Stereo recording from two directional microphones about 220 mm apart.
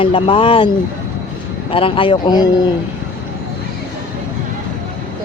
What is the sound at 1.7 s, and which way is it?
Speech, 25° left (ahead or behind).